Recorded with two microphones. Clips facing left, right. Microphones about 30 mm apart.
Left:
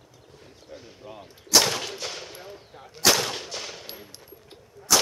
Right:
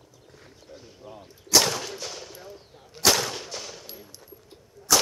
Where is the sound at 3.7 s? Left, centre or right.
Left.